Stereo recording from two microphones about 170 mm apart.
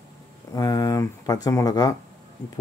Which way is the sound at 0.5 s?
20° left (ahead or behind).